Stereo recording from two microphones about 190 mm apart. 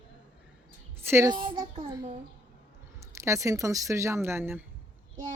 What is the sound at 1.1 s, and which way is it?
A woman's voice, 15° right (ahead or behind).